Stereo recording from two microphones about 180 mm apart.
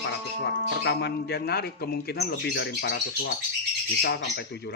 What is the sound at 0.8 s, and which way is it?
A man's voice, 65° left (ahead or behind).